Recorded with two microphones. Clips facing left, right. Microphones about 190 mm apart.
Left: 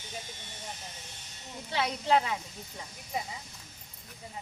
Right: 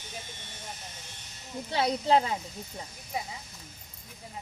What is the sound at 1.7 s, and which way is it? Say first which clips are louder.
Speech: right 3 dB; 35° right (ahead or behind).